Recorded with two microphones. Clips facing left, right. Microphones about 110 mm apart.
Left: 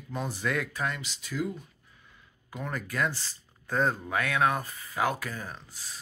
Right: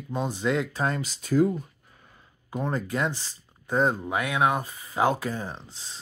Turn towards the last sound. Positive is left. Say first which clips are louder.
# right 4 dB
turn(degrees=-25)  # may be behind; listen again after turning